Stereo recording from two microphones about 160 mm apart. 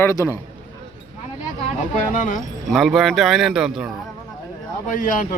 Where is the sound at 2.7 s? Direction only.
Centre (ahead or behind).